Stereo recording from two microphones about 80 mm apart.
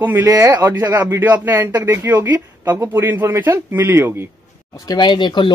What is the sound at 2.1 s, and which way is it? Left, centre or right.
A man's voice, right.